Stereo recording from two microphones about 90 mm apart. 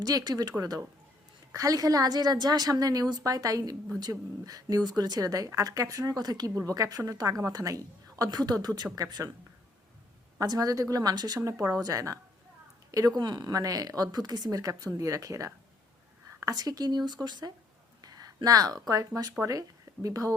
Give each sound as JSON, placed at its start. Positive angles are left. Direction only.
{"t": 0.0, "sound": "speech", "side_deg": -45}
{"t": 1.5, "sound": "speech", "side_deg": -40}
{"t": 10.3, "sound": "speech", "side_deg": -45}
{"t": 11.3, "sound": "speech", "side_deg": -35}
{"t": 13.1, "sound": "speech", "side_deg": -50}
{"t": 18.0, "sound": "a sound", "side_deg": -45}
{"t": 18.4, "sound": "speech", "side_deg": -45}